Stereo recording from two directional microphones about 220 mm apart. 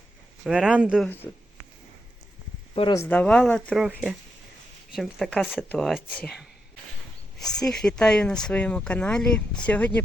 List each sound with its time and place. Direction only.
0.4 s speech: 5° right (ahead or behind)
2.7 s speech: 25° left (ahead or behind)
3.0 s speech: 5° left (ahead or behind)